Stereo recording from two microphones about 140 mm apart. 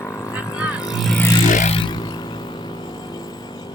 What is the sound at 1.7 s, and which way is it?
Vehicle, 30° left (ahead or behind).